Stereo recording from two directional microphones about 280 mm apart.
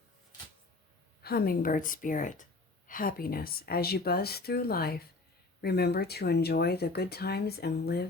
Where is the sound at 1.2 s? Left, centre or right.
Left.